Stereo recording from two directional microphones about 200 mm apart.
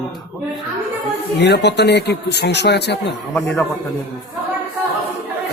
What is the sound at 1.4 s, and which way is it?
Speech, 55° left (ahead or behind).